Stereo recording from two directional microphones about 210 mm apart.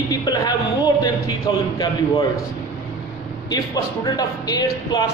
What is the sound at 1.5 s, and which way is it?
Speech, 20° left (ahead or behind).